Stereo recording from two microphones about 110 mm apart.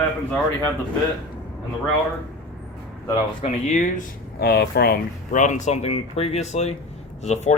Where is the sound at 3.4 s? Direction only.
90° left.